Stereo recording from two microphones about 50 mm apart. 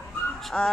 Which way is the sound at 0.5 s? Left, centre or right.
Left.